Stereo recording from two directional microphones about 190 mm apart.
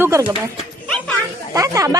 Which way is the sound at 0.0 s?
15° right (ahead or behind).